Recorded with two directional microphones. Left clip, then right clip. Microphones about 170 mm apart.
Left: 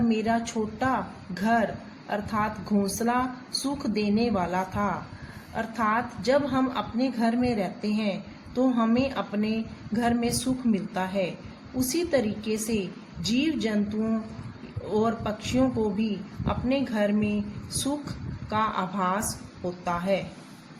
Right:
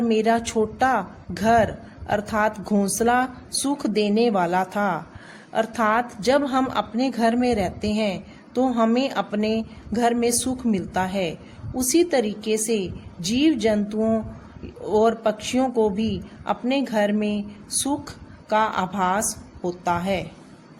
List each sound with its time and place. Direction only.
0.1 s a woman's voice: 65° right (ahead or behind)
18.4 s a woman's voice: 60° right (ahead or behind)